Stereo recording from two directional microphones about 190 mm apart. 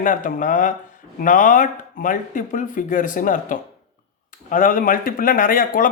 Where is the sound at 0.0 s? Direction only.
45° left (ahead or behind).